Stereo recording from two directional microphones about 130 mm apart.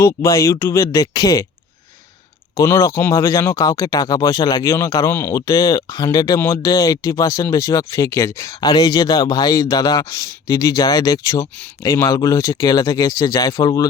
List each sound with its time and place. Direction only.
0.2 s speech: 20° left (ahead or behind)
2.6 s speech: 20° left (ahead or behind)